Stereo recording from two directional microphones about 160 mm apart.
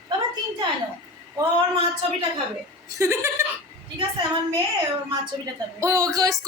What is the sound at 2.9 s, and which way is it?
Speech, 20° right (ahead or behind).